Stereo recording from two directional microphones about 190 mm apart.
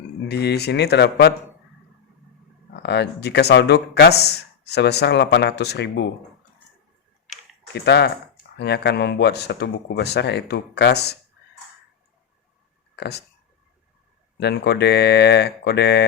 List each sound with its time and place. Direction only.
0.3 s speech: 60° left (ahead or behind)
2.8 s speech: 60° left (ahead or behind)
7.7 s speech: 60° left (ahead or behind)
13.0 s speech: 60° left (ahead or behind)
14.3 s speech: 60° left (ahead or behind)